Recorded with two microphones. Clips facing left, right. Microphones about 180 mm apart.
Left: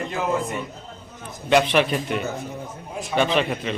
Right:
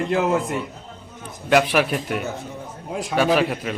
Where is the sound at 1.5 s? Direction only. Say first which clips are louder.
Even; 5° right (ahead or behind).